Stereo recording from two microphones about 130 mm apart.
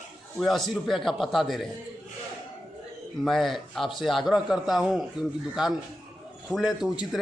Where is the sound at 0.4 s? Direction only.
Centre (ahead or behind).